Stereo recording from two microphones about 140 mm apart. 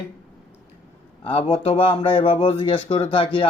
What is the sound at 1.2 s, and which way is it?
Speech, 40° left (ahead or behind).